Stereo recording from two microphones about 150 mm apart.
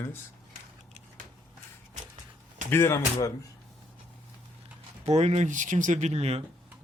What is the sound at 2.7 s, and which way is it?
Speech, 15° left (ahead or behind).